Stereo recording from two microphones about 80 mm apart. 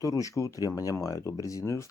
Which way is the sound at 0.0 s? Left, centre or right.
Left.